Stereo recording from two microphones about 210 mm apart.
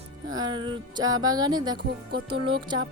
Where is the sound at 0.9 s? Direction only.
20° right (ahead or behind).